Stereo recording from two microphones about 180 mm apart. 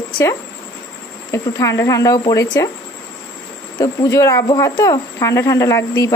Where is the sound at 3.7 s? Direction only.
20° left (ahead or behind).